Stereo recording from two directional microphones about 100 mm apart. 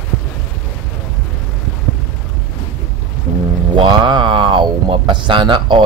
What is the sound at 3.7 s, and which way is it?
Speech, 50° right (ahead or behind).